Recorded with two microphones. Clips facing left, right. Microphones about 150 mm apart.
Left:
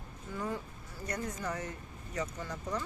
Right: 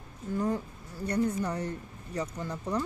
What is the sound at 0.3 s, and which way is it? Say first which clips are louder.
Speech: right 7 dB; 40° right (ahead or behind).